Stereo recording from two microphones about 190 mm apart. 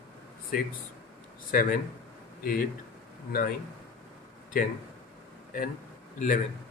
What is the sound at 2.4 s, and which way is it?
Speech, 45° left (ahead or behind).